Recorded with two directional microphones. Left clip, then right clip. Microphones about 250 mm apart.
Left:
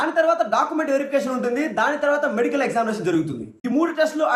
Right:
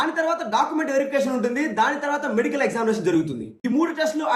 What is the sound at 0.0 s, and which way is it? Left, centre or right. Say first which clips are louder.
Speech: left 4 dB; centre.